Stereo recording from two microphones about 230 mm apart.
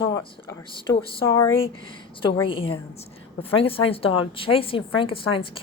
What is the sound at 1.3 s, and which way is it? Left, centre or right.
Speech, centre.